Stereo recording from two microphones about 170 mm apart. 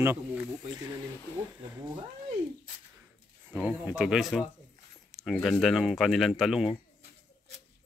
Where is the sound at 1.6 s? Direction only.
20° right (ahead or behind).